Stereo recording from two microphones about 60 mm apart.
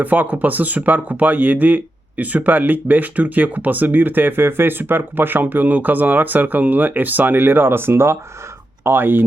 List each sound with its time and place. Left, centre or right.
0.0 s speech: right